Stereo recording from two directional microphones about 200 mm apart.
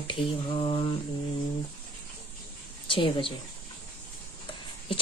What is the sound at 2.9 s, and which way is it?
Speech, 25° left (ahead or behind).